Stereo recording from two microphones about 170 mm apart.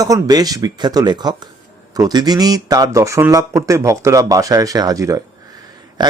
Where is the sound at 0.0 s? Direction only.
20° right (ahead or behind).